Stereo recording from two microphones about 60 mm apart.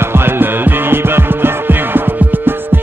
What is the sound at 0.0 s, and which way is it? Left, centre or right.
Music, right.